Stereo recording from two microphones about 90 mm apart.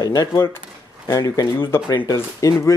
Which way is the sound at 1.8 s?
50° left (ahead or behind).